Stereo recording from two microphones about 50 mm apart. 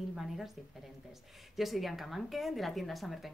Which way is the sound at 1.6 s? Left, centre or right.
Centre.